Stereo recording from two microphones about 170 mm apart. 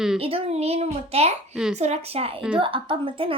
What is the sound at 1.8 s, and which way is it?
Speech, 40° right (ahead or behind).